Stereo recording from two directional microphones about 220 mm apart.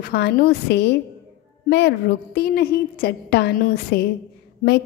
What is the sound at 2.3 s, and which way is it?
A woman's voice, 45° left (ahead or behind).